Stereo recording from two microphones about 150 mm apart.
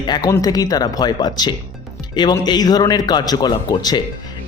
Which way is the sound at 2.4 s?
25° left (ahead or behind).